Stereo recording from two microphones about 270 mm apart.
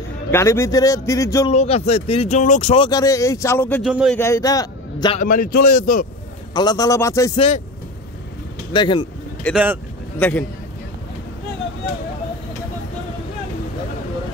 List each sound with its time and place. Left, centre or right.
0.3 s speech: centre
1.5 s speech: left; by 4.2 s centre
4.2 s a man's voice: centre
5.2 s speech: left
6.5 s speech: centre
8.7 s speech: centre
9.4 s speech: centre